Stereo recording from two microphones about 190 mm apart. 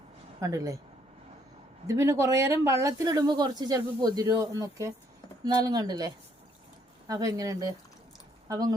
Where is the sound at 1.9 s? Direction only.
15° right (ahead or behind).